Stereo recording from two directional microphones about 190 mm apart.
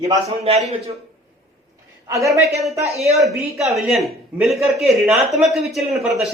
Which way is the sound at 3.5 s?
Centre (ahead or behind).